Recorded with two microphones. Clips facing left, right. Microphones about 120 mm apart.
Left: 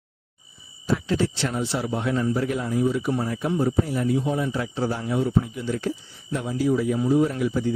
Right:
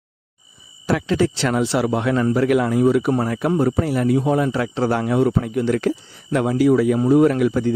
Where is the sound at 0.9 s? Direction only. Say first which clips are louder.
Right 5 dB; 90° right.